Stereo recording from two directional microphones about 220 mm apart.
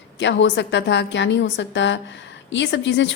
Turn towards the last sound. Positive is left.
turn(degrees=55)  # may be behind; listen again after turning